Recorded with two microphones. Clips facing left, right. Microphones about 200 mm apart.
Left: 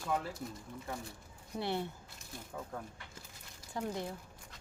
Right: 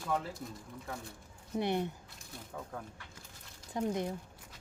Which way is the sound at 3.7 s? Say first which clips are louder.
Right 4 dB; 20° right (ahead or behind).